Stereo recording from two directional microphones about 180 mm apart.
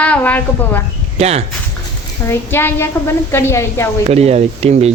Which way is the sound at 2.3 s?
15° left (ahead or behind).